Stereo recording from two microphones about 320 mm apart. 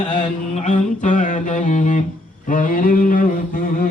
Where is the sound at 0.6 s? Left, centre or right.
Left.